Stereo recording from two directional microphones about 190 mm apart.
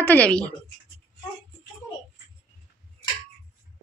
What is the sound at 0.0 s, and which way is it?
Speech, 10° left (ahead or behind).